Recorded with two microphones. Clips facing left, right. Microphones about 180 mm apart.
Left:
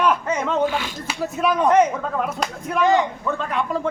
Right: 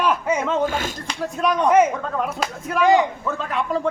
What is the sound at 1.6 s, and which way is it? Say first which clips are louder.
A man's voice: right 1 dB; 10° right (ahead or behind).